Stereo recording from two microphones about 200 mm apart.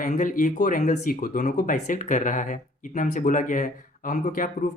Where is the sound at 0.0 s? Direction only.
40° left (ahead or behind).